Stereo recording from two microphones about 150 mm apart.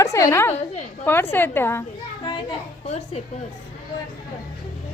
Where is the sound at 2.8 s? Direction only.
45° left (ahead or behind).